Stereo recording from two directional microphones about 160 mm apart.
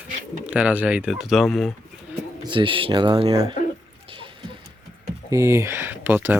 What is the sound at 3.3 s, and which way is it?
Speech, 20° right (ahead or behind).